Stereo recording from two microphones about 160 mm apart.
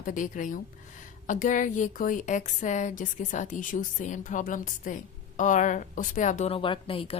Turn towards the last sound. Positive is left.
turn(degrees=35)  # may be behind; listen again after turning